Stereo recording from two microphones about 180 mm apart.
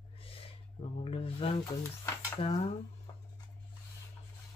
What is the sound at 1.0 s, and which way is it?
Speech, 30° left (ahead or behind).